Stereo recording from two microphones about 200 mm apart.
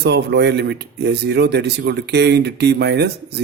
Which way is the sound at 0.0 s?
55° right (ahead or behind).